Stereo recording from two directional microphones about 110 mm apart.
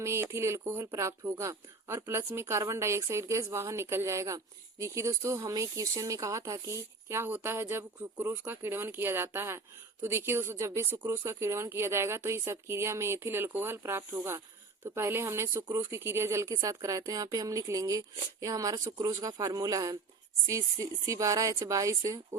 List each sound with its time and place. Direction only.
0.0 s speech: 25° right (ahead or behind)